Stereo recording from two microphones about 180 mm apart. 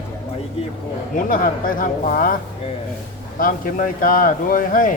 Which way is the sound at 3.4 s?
50° left (ahead or behind).